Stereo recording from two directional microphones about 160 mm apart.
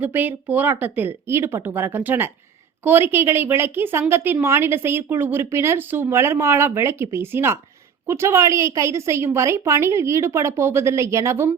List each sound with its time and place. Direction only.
0.0 s a woman's voice: 10° right (ahead or behind)